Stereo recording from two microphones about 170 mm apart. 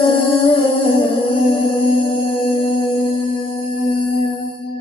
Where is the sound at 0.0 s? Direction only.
30° left (ahead or behind).